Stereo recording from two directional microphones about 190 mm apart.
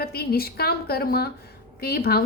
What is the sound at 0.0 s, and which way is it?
A woman's voice, 55° left (ahead or behind).